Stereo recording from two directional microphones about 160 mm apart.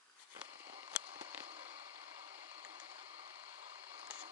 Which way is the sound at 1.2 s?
10° right (ahead or behind).